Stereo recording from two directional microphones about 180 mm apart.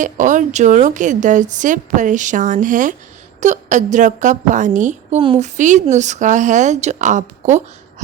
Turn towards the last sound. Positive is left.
turn(degrees=-45)  # may be behind; listen again after turning